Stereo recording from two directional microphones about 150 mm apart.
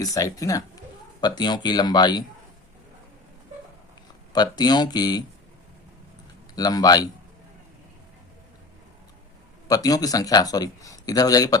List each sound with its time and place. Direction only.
0.0 s a man's voice: 25° left (ahead or behind)
4.3 s a man's voice: 25° left (ahead or behind)
6.6 s a man's voice: 25° left (ahead or behind)
9.6 s a man's voice: 25° left (ahead or behind)